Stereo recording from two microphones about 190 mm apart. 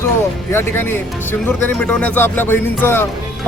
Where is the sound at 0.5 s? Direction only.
10° left (ahead or behind).